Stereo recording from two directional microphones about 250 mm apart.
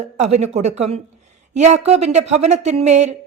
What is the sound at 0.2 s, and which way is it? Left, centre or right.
Speech, right.